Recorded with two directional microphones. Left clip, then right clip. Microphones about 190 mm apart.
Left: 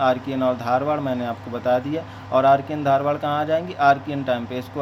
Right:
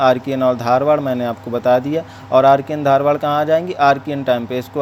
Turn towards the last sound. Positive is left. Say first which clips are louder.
# right 6 dB
turn(degrees=-30)  # may be behind; listen again after turning